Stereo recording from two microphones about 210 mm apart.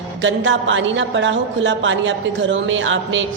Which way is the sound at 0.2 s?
60° right (ahead or behind).